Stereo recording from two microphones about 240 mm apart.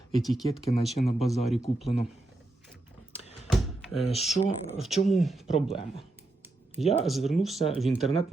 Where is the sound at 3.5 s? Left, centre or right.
Centre.